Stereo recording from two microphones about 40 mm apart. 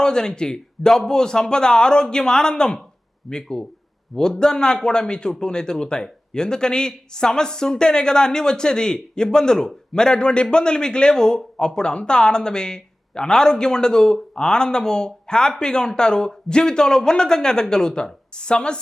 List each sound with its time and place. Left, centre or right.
0.0 s speech: centre